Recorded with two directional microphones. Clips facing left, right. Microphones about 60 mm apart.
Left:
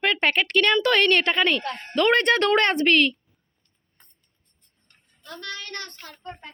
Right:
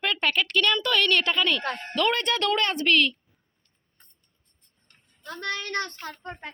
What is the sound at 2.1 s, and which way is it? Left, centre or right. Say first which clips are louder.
Speech: left 6 dB; left.